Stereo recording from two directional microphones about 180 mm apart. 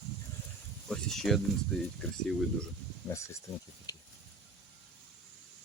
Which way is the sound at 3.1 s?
15° left (ahead or behind).